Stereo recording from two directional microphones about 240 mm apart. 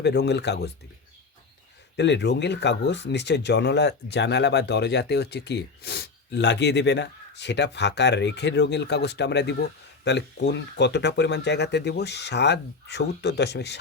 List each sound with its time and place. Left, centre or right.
0.0 s speech: left
2.0 s speech: left